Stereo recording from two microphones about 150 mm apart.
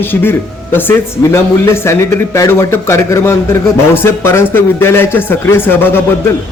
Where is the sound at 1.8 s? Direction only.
20° left (ahead or behind).